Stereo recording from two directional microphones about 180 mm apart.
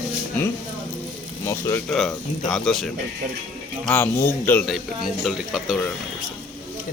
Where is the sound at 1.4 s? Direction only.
15° left (ahead or behind).